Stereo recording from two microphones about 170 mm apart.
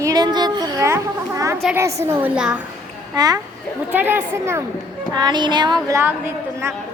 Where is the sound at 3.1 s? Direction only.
20° right (ahead or behind).